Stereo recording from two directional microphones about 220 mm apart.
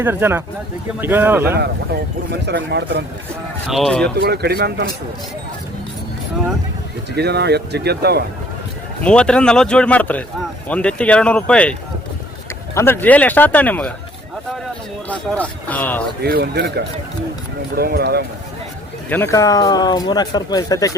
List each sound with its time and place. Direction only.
0.0 s speech: 10° right (ahead or behind)
2.3 s speech: 50° right (ahead or behind)
3.7 s speech: centre (ahead or behind)
4.0 s speech: 45° right (ahead or behind)
7.2 s speech: 50° right (ahead or behind)
9.0 s speech: 5° left (ahead or behind)
15.1 s speech: 5° left (ahead or behind)
16.2 s speech: 45° right (ahead or behind)
19.0 s speech: 10° left (ahead or behind)